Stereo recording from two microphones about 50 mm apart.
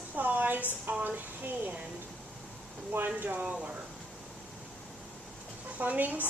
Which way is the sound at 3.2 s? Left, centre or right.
Right.